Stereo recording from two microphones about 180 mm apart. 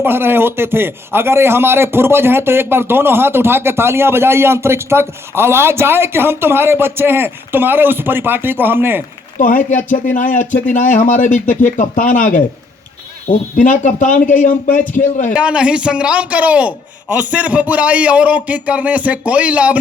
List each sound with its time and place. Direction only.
0.0 s speech: 10° right (ahead or behind)
9.4 s speech: 50° left (ahead or behind)
13.6 s speech: 45° left (ahead or behind)
15.3 s speech: 5° right (ahead or behind)